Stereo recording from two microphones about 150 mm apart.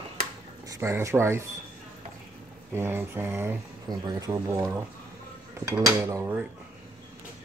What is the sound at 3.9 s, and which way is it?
Speech, 25° right (ahead or behind).